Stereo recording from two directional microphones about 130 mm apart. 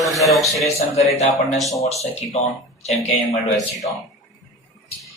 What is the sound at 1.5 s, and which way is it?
Speech, centre (ahead or behind).